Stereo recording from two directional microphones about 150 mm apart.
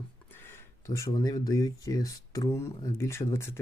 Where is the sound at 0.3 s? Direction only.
15° left (ahead or behind).